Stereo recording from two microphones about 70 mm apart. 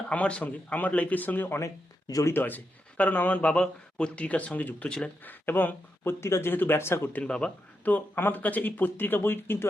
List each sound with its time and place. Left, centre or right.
0.1 s speech: centre
5.2 s speech: left
7.3 s speech: centre; by 9.6 s left